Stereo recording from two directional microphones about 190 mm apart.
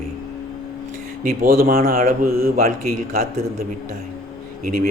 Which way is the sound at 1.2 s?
50° right (ahead or behind).